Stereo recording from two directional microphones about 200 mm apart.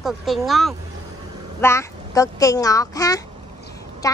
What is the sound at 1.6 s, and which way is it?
A woman's voice, 15° left (ahead or behind).